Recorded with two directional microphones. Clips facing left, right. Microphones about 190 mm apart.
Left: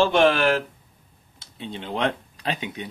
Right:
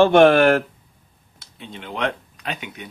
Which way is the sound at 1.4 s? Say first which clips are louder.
Left 3 dB; 30° left (ahead or behind).